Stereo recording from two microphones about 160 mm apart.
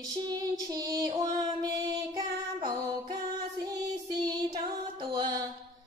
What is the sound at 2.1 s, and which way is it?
Child singing, 25° right (ahead or behind).